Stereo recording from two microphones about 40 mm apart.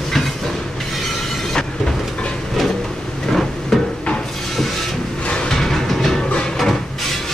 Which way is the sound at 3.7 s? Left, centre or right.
Centre.